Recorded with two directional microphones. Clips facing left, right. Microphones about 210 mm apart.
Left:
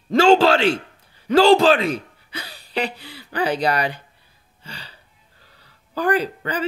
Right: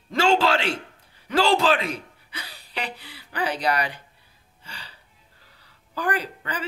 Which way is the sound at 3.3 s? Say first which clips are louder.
Left 4 dB; 35° left (ahead or behind).